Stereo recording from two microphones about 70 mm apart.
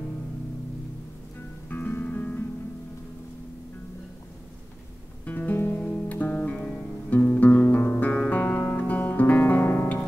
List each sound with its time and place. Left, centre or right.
1.7 s music: left
5.2 s music: left
7.1 s guitar: left